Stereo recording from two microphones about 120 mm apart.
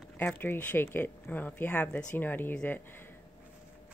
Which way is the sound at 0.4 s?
15° left (ahead or behind).